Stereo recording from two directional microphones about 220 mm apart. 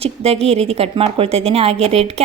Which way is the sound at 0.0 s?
25° right (ahead or behind).